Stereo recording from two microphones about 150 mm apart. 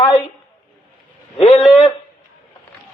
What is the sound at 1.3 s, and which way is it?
Speech, 35° left (ahead or behind).